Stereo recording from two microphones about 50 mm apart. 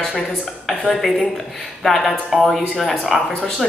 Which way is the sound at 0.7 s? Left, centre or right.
Centre.